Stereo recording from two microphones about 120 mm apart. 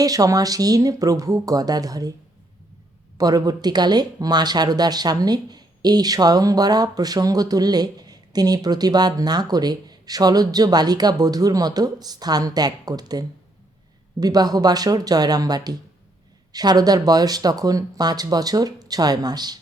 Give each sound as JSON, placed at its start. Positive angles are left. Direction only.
{"t": 0.0, "sound": "speech", "side_deg": -30}
{"t": 3.2, "sound": "speech", "side_deg": -30}